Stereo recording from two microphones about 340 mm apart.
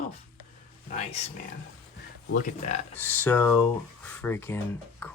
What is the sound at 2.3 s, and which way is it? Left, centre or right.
Speech, centre.